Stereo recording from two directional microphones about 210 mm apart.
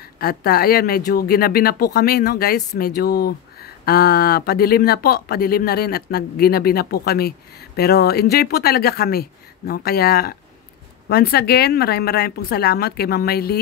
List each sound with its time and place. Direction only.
0.2 s speech: 50° left (ahead or behind)